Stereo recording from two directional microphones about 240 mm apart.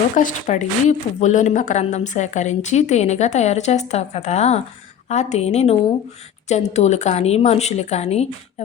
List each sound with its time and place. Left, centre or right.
0.2 s a woman's voice: left